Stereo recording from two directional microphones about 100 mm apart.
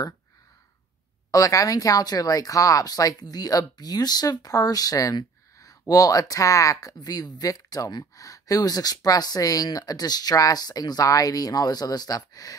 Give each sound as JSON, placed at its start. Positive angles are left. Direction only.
{"t": 1.3, "sound": "speech", "side_deg": 35}